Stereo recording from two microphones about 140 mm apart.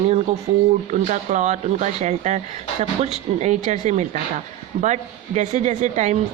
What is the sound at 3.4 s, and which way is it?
Speech, 55° right (ahead or behind).